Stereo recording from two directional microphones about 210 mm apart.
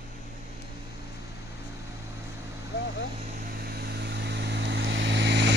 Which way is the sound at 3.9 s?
50° right (ahead or behind).